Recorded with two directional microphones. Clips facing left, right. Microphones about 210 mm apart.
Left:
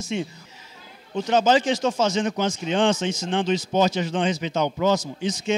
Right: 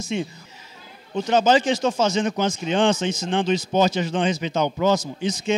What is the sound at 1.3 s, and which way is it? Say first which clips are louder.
Speech: right 1 dB; 10° right (ahead or behind).